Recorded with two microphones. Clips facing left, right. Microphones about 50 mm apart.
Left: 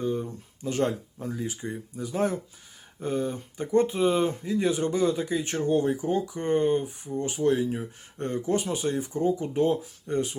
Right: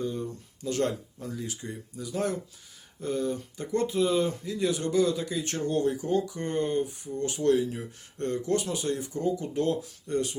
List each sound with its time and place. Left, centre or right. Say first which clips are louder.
0.0 s speech: left 3 dB; left
7.5 s speech: even; left